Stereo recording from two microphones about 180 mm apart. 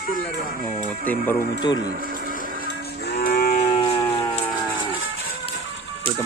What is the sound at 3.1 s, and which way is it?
Livestock, 60° left (ahead or behind).